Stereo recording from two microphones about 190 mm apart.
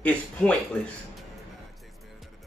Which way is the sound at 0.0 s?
5° left (ahead or behind).